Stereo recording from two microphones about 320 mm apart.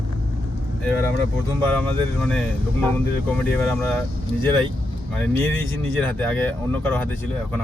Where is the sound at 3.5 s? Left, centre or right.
Centre.